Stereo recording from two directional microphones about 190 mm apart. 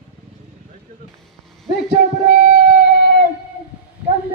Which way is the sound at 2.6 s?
60° left (ahead or behind).